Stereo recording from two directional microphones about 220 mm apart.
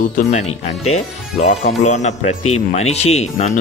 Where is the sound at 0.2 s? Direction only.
30° left (ahead or behind).